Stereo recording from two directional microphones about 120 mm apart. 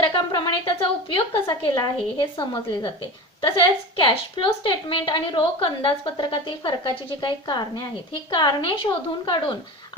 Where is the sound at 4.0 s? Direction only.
45° left (ahead or behind).